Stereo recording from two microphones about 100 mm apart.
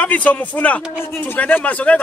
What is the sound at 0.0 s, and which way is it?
Speech, 15° left (ahead or behind).